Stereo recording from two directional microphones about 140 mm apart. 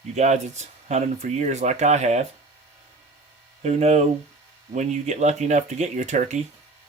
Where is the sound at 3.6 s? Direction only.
50° right (ahead or behind).